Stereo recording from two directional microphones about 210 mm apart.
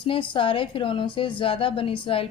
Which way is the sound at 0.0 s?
25° left (ahead or behind).